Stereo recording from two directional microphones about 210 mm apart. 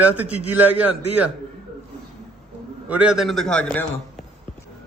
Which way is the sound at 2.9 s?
5° right (ahead or behind).